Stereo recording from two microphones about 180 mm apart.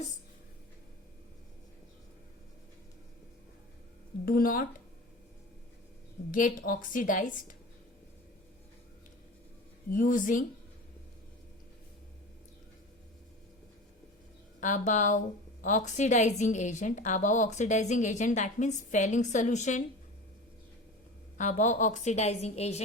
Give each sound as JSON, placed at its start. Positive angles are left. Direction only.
{"t": 4.3, "sound": "a woman's voice", "side_deg": 50}
{"t": 6.3, "sound": "a woman's voice", "side_deg": 50}
{"t": 9.9, "sound": "a woman's voice", "side_deg": 50}
{"t": 14.6, "sound": "a woman's voice", "side_deg": 45}
{"t": 21.3, "sound": "a woman's voice", "side_deg": 45}